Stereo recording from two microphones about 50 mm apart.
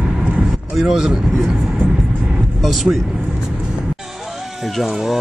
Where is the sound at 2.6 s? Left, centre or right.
Centre.